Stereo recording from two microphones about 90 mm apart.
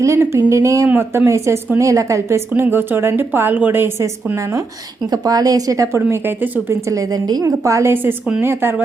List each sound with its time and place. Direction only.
0.0 s a woman's voice: 35° right (ahead or behind)
2.5 s a woman's voice: 25° right (ahead or behind)
5.1 s a woman's voice: 45° right (ahead or behind)
8.4 s a woman's voice: 25° right (ahead or behind)